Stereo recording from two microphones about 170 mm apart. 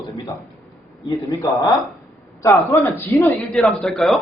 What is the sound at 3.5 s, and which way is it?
Speech, centre (ahead or behind).